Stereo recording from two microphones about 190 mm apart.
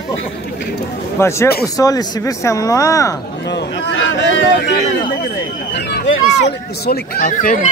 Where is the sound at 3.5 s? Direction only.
65° left (ahead or behind).